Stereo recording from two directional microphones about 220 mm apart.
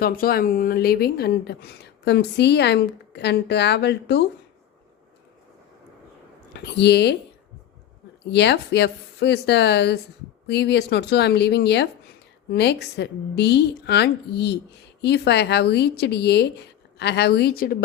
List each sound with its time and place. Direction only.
0.0 s speech: 45° left (ahead or behind)
6.5 s speech: 50° left (ahead or behind)
8.3 s speech: 50° left (ahead or behind)